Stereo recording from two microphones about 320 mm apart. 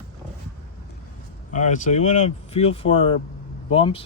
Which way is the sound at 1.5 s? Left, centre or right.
Left.